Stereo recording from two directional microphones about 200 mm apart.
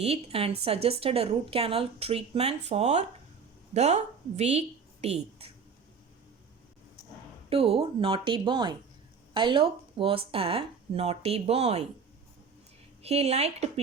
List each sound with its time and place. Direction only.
0.0 s a woman's voice: 30° right (ahead or behind)
7.5 s speech: 30° right (ahead or behind)
13.0 s speech: 30° right (ahead or behind)